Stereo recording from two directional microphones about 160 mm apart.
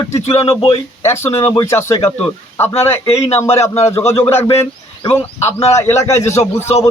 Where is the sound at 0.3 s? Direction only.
20° left (ahead or behind).